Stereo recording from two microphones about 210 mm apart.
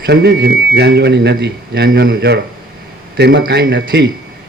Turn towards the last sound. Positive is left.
turn(degrees=-50)  # may be behind; listen again after turning